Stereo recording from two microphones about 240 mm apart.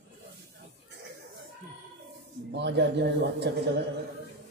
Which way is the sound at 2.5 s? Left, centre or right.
Right.